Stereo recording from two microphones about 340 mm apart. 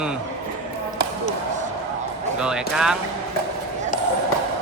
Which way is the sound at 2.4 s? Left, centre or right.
Centre.